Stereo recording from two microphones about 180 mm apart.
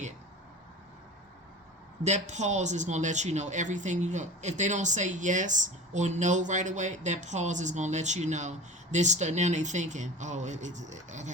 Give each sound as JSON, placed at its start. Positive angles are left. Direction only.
{"t": 2.0, "sound": "speech", "side_deg": -40}